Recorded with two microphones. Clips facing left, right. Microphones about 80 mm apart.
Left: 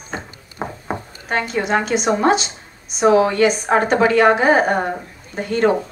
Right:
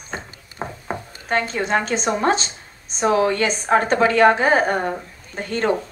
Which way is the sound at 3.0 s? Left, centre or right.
Left.